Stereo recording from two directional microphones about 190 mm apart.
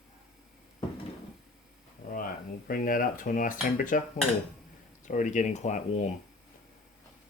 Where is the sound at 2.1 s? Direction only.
50° left (ahead or behind).